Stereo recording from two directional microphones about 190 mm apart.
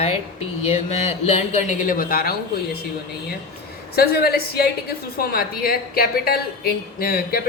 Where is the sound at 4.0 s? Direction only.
55° left (ahead or behind).